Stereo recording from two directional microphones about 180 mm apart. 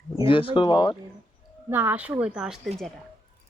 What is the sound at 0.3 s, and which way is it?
Speech, 30° left (ahead or behind).